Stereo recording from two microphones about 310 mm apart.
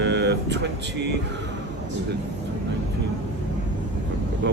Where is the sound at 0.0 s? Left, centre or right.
Right.